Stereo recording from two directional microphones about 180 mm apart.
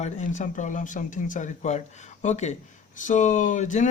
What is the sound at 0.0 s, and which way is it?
Speech, 45° left (ahead or behind).